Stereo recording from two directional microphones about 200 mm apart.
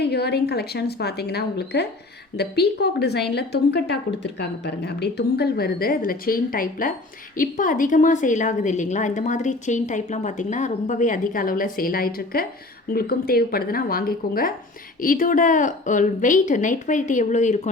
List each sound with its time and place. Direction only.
0.0 s a woman's voice: 55° left (ahead or behind); by 17.7 s 35° left (ahead or behind)